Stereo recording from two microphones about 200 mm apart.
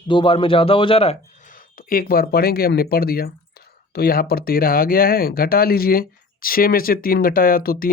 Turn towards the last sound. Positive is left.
turn(degrees=45)  # may be behind; listen again after turning